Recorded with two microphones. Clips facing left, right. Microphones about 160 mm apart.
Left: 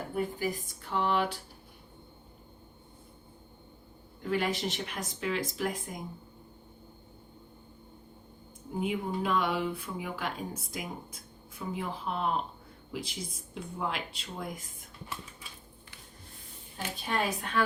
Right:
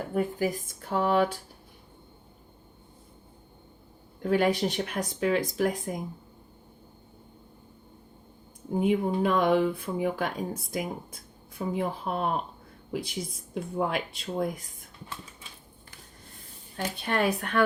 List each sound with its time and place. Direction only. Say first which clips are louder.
0.1 s speech: right 5 dB; 45° right (ahead or behind)
4.2 s speech: right 6 dB; 45° right (ahead or behind)
8.8 s speech: right 7 dB; 50° right (ahead or behind)
16.7 s a woman's voice: right 4 dB; 60° right (ahead or behind)